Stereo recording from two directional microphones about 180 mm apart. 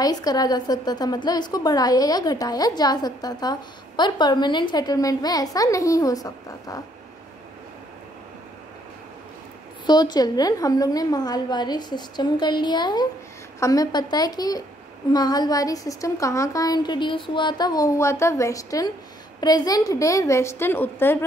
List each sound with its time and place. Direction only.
0.0 s a woman's voice: 20° left (ahead or behind)
9.8 s a woman's voice: 25° left (ahead or behind)